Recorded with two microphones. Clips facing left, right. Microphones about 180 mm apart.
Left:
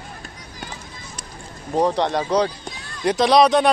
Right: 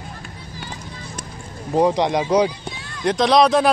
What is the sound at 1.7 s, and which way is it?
Speech, 10° right (ahead or behind).